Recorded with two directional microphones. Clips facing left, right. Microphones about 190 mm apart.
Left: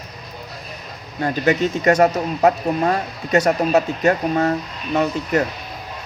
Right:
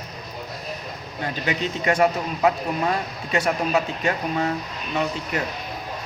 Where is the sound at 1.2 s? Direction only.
45° left (ahead or behind).